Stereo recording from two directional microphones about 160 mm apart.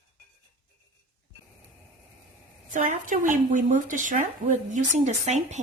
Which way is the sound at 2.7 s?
55° right (ahead or behind).